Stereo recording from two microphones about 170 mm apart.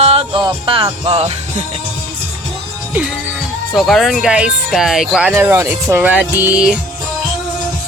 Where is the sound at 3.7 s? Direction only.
Centre (ahead or behind).